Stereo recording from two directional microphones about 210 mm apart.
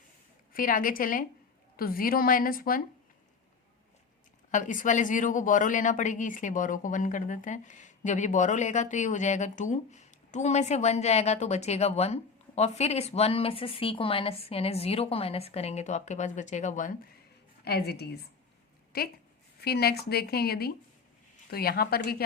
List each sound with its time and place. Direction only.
0.5 s speech: 40° left (ahead or behind)
4.5 s speech: 35° left (ahead or behind)
17.7 s speech: 50° left (ahead or behind)